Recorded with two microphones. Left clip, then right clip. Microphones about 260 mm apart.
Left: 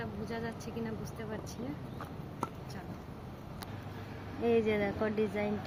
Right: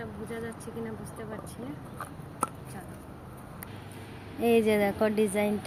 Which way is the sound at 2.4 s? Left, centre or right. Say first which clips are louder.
Right 7 dB; right.